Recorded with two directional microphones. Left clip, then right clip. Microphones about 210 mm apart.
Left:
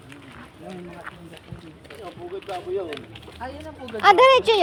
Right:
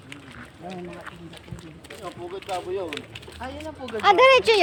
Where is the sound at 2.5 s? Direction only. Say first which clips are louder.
Right 3 dB; 45° right (ahead or behind).